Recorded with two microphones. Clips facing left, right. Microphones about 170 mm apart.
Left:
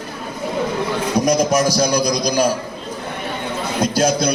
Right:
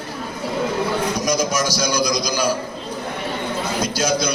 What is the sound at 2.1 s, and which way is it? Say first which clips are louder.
Speech: left 4 dB; 55° left (ahead or behind).